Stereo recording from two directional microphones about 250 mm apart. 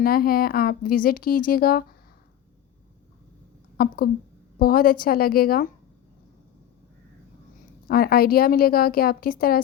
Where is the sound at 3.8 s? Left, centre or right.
Left.